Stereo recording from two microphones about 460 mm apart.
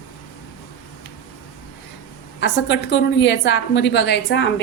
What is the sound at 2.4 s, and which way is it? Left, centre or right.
A woman's voice, left.